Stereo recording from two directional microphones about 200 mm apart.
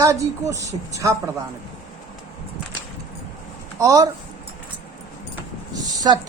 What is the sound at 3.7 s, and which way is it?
Speech, 15° right (ahead or behind).